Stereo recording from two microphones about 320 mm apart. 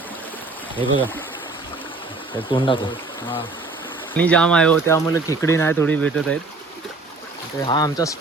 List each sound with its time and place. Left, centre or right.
0.9 s speech: centre
2.5 s speech: centre
4.2 s speech: centre
7.6 s speech: centre